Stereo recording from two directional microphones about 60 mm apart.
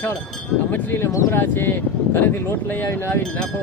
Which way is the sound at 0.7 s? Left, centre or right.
Left.